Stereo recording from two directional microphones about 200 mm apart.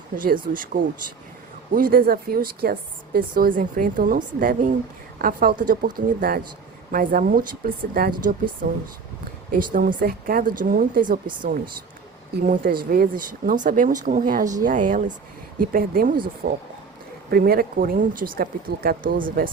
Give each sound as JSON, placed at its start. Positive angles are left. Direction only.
{"t": 0.2, "sound": "a woman's voice", "side_deg": -45}
{"t": 12.5, "sound": "a woman's voice", "side_deg": -45}